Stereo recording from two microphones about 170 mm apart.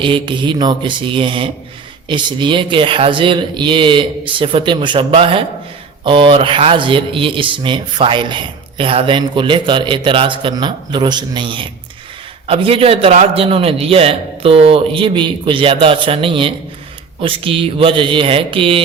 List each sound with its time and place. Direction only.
0.0 s a man's voice: 30° right (ahead or behind)